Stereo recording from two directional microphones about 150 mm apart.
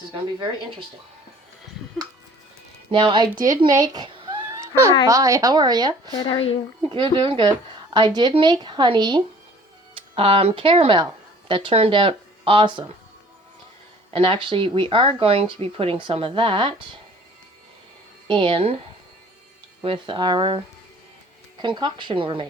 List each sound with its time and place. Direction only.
2.9 s speech: 35° right (ahead or behind)
3.8 s a sound: 30° right (ahead or behind)
4.4 s cat: 20° right (ahead or behind)
5.0 s a woman's voice: 20° right (ahead or behind)
6.1 s speech: 30° left (ahead or behind)
6.8 s speech: 35° right (ahead or behind)
14.1 s speech: 35° right (ahead or behind)
18.3 s speech: 35° right (ahead or behind)
19.8 s speech: 35° right (ahead or behind)
21.6 s speech: 30° right (ahead or behind)